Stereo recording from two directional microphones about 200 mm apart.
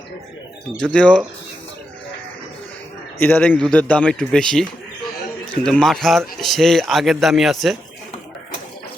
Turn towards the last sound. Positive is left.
turn(degrees=0)  # may be behind; listen again after turning